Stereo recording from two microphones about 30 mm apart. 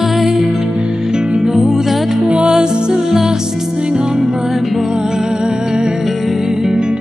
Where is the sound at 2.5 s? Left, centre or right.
Centre.